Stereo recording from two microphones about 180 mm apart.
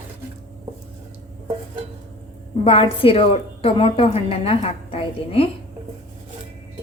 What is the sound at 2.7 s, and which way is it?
A woman's voice, 30° left (ahead or behind).